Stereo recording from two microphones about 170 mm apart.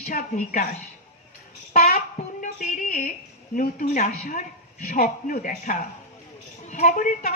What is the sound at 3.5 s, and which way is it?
A woman's voice, 55° left (ahead or behind).